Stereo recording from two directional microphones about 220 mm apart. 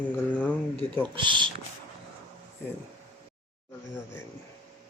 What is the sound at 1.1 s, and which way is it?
Speech, 20° right (ahead or behind).